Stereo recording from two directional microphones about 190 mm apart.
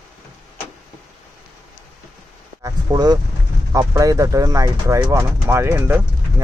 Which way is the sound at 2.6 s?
15° right (ahead or behind).